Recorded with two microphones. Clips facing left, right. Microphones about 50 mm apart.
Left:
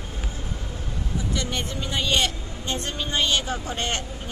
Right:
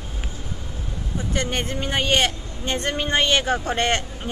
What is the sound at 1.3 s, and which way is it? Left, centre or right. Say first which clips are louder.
Speech: right 6 dB; right.